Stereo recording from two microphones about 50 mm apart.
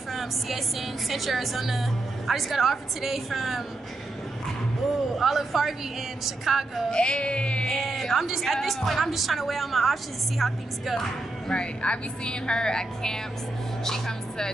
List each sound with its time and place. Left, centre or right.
0.1 s a woman's voice: centre
5.1 s a woman's voice: centre
6.9 s music: centre
7.7 s a woman's voice: centre
11.4 s a woman's voice: centre